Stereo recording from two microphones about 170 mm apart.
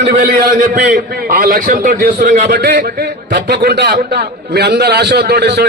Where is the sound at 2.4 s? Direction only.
65° right (ahead or behind).